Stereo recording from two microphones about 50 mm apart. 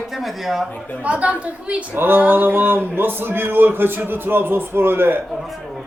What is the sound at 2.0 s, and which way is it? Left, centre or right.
A man's voice, right.